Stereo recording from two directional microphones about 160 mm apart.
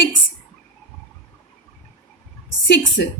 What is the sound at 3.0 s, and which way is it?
Speech, 90° left.